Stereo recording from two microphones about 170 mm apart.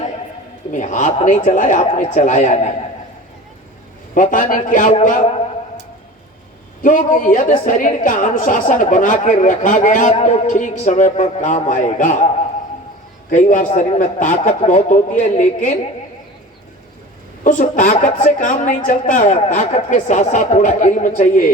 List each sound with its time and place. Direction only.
0.7 s a woman's voice: 45° left (ahead or behind)
4.1 s a woman's voice: 50° left (ahead or behind)
6.8 s a woman's voice: 50° left (ahead or behind)
13.3 s a woman's voice: 50° left (ahead or behind)
17.4 s a woman's voice: 50° left (ahead or behind)